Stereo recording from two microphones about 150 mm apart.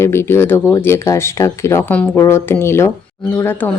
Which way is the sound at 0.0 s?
15° left (ahead or behind).